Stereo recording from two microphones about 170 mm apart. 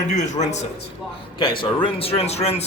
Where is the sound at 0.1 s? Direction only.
45° left (ahead or behind).